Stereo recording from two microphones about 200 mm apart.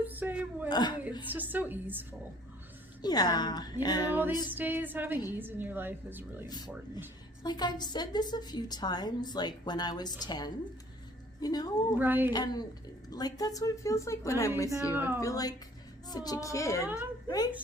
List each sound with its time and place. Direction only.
0.0 s a sound: 10° right (ahead or behind)
0.7 s a woman's voice: 20° left (ahead or behind)
1.3 s speech: 10° right (ahead or behind)
3.0 s a woman's voice: 20° left (ahead or behind)
4.5 s speech: 10° right (ahead or behind)
6.4 s a woman's voice: 20° left (ahead or behind)
11.9 s speech: 10° right (ahead or behind)
12.3 s a woman's voice: 20° left (ahead or behind)
14.9 s speech: 10° right (ahead or behind)
15.2 s a woman's voice: 15° left (ahead or behind)